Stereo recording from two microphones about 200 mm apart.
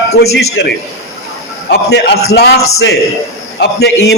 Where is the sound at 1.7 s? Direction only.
55° left (ahead or behind).